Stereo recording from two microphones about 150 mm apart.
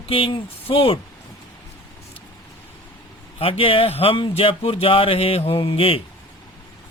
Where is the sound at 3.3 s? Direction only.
40° left (ahead or behind).